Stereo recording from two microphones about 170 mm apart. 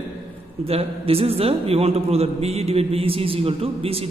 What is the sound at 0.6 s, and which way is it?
A woman's voice, 35° right (ahead or behind).